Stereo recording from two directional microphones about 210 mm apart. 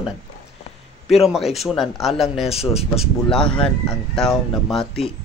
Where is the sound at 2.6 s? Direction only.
30° left (ahead or behind).